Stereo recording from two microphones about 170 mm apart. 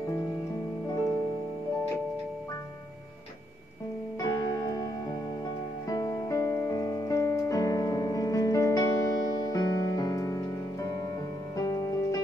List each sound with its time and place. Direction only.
4.2 s music: 20° left (ahead or behind)
5.9 s music: 20° left (ahead or behind)